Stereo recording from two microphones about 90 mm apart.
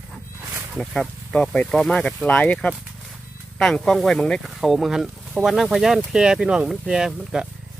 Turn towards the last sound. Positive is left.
turn(degrees=-5)  # may be behind; listen again after turning